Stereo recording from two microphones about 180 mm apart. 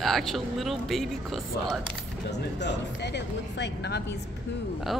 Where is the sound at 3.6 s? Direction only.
65° left (ahead or behind).